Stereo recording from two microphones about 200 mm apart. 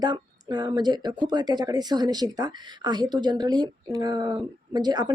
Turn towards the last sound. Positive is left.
turn(degrees=-20)  # may be behind; listen again after turning